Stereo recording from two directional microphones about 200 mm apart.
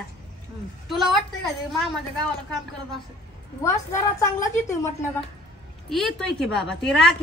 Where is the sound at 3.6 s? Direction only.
15° left (ahead or behind).